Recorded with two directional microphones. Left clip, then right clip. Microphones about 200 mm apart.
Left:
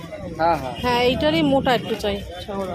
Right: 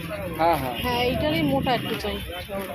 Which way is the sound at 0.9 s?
30° left (ahead or behind).